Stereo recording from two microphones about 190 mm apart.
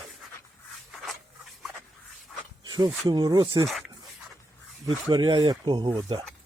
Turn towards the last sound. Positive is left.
turn(degrees=-25)  # may be behind; listen again after turning